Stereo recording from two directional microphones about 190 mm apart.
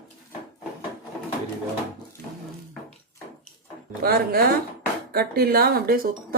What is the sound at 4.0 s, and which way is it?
Speech, 55° right (ahead or behind).